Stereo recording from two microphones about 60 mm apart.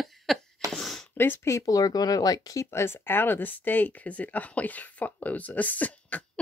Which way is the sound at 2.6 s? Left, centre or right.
Left.